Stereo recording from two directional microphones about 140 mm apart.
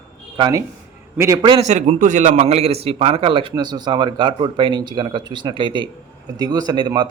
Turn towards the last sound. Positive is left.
turn(degrees=-30)  # may be behind; listen again after turning